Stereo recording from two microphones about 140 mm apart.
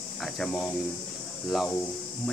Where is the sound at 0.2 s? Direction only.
Centre (ahead or behind).